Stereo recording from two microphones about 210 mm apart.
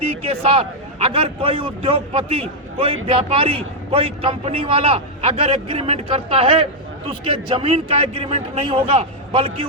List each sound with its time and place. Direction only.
0.5 s a man's voice: 30° right (ahead or behind)